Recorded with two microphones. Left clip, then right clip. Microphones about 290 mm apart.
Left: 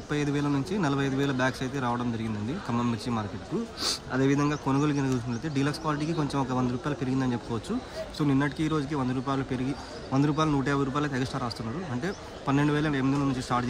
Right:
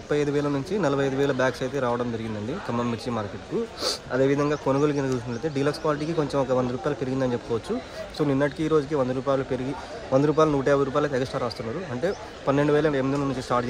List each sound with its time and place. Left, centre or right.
0.1 s a man's voice: centre
8.2 s a man's voice: centre